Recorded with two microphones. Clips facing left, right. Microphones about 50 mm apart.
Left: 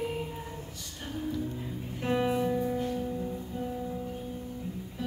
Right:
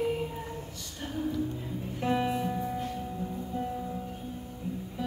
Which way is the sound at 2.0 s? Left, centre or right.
Centre.